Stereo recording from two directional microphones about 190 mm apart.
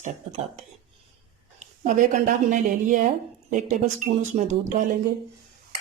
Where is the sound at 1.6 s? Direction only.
40° right (ahead or behind).